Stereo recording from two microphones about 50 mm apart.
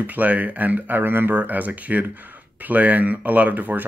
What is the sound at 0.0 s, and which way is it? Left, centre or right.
Speech, right.